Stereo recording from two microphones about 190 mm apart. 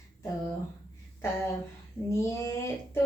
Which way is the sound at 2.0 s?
15° left (ahead or behind).